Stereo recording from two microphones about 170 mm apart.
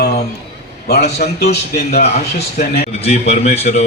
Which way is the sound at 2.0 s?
40° left (ahead or behind).